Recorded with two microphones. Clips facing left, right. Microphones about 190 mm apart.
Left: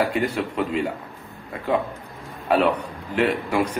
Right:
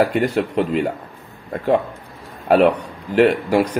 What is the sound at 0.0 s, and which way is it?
Speech, 40° right (ahead or behind).